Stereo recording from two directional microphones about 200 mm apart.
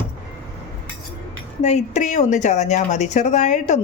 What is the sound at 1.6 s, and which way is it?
Speech, 35° left (ahead or behind).